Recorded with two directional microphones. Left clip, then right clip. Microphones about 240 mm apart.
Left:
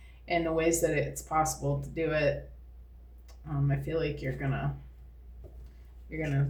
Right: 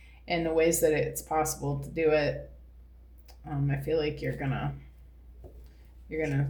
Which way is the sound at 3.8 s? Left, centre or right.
Right.